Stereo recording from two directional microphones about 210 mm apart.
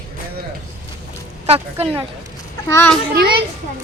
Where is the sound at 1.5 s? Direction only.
30° right (ahead or behind).